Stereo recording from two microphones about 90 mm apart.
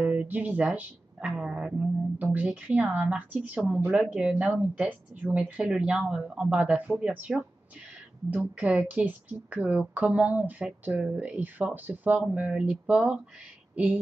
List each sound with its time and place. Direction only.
0.0 s a woman's voice: 15° right (ahead or behind)